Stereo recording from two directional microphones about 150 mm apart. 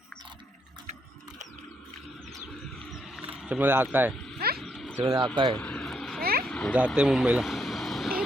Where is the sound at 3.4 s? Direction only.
10° right (ahead or behind).